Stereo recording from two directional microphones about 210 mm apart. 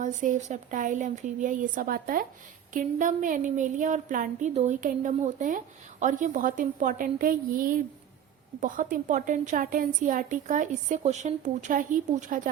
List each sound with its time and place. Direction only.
0.0 s a woman's voice: 40° right (ahead or behind)